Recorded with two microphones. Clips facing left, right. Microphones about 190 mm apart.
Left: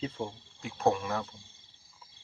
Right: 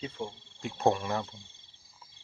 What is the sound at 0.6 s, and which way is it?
Speech, centre (ahead or behind).